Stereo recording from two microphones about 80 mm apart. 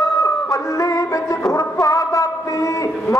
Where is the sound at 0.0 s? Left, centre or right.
Left.